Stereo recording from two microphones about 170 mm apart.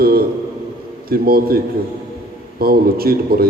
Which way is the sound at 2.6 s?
60° right (ahead or behind).